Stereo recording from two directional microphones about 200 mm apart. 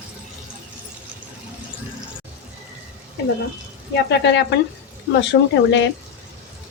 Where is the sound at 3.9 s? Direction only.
60° left (ahead or behind).